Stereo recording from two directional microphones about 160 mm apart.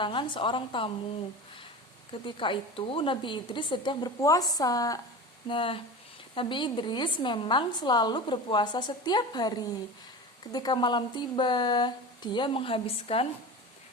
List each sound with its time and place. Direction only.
0.0 s a woman's voice: 30° left (ahead or behind)
2.2 s a woman's voice: 30° left (ahead or behind)